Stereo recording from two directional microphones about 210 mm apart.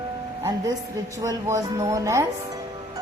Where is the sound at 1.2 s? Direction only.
15° right (ahead or behind).